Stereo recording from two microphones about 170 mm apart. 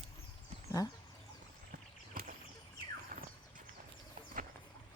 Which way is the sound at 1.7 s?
55° right (ahead or behind).